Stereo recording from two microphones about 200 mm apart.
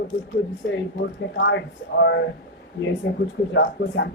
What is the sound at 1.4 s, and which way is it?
Speech, 65° left (ahead or behind).